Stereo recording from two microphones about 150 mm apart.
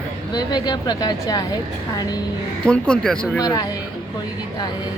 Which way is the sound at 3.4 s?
25° left (ahead or behind).